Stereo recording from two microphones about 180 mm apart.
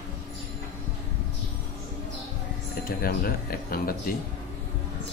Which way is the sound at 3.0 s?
55° left (ahead or behind).